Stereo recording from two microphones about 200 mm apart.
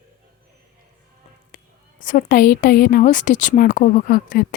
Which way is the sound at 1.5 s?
40° left (ahead or behind).